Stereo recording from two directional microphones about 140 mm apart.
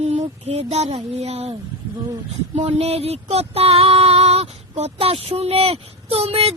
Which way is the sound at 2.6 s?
50° right (ahead or behind).